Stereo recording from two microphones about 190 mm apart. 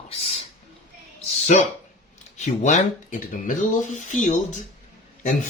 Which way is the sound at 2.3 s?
40° left (ahead or behind).